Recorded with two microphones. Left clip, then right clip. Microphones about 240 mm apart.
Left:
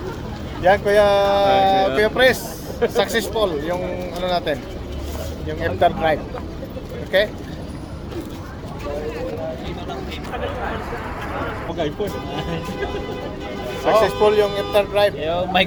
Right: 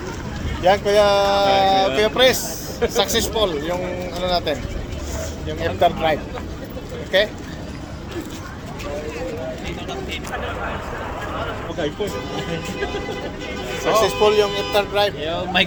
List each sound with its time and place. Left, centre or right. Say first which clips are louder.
0.6 s speech: left 1 dB; centre
14.0 s speech: right 3 dB; centre
15.2 s speech: left 1 dB; left